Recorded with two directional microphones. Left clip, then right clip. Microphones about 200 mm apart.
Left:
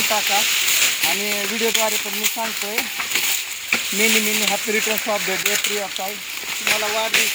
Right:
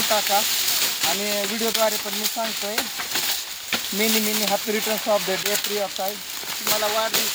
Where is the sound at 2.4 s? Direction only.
Centre (ahead or behind).